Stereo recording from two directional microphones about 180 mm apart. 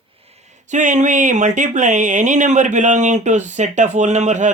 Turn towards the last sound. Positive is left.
turn(degrees=-40)  # may be behind; listen again after turning